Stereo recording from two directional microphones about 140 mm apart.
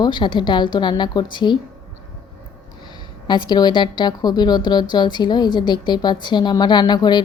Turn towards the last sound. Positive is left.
turn(degrees=30)  # may be behind; listen again after turning